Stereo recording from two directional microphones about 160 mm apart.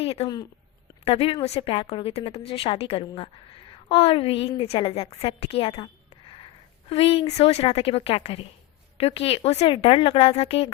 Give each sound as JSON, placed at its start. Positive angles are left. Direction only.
{"t": 0.0, "sound": "a woman's voice", "side_deg": 35}